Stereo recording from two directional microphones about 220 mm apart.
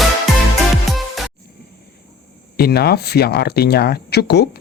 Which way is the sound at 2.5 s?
45° left (ahead or behind).